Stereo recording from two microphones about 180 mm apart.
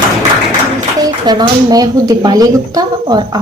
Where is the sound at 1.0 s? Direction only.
20° right (ahead or behind).